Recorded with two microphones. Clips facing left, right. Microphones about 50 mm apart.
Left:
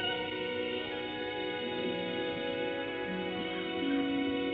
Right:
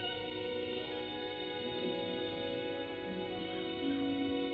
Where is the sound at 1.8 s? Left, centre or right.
Left.